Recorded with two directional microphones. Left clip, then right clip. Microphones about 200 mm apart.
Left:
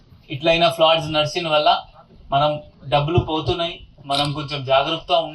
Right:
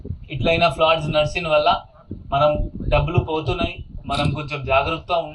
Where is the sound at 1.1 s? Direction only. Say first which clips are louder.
Right 1 dB; 35° left (ahead or behind).